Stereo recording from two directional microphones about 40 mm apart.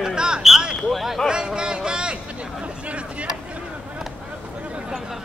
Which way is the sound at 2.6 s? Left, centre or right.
Right.